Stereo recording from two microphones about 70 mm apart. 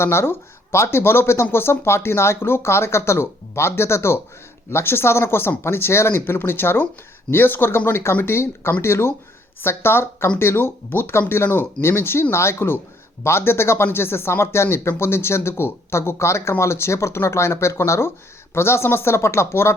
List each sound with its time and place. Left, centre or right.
0.0 s speech: left